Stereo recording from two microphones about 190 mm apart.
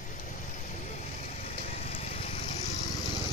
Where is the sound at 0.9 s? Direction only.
35° left (ahead or behind).